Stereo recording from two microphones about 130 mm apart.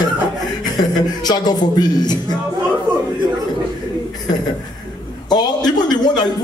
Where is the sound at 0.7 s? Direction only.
30° left (ahead or behind).